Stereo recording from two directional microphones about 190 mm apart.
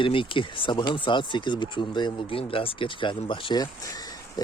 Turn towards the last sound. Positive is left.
turn(degrees=20)  # may be behind; listen again after turning